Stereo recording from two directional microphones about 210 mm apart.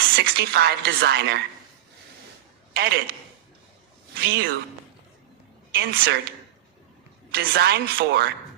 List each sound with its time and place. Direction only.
0.2 s a woman's voice: 50° right (ahead or behind)
2.7 s a woman's voice: 50° right (ahead or behind)
4.2 s a woman's voice: 50° right (ahead or behind)
5.7 s a woman's voice: 45° right (ahead or behind)
7.3 s a woman's voice: 50° right (ahead or behind)